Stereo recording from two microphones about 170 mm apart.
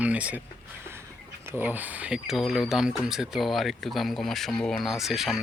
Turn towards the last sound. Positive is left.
turn(degrees=0)  # may be behind; listen again after turning